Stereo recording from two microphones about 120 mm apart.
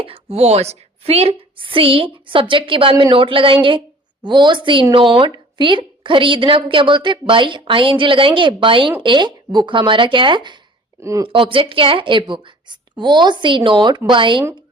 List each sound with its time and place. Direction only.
0.0 s a woman's voice: 55° right (ahead or behind)
11.0 s speech: 25° right (ahead or behind)
11.3 s a woman's voice: 45° right (ahead or behind)